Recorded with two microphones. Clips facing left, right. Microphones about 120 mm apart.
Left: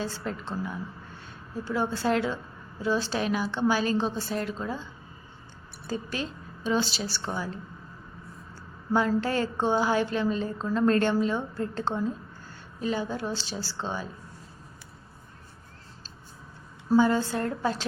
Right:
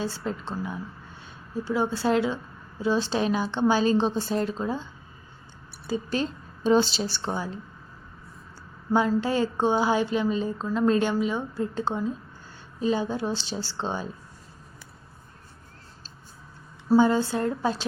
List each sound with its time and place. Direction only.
0.3 s a woman's voice: 20° right (ahead or behind)
6.7 s a woman's voice: 30° right (ahead or behind)
8.9 s a woman's voice: 20° right (ahead or behind)
17.0 s a woman's voice: 20° right (ahead or behind)